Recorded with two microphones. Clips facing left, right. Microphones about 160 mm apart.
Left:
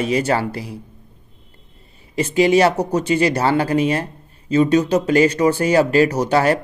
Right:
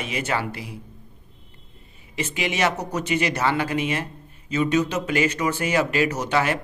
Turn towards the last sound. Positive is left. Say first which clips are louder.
# left 7 dB
turn(degrees=35)  # may be behind; listen again after turning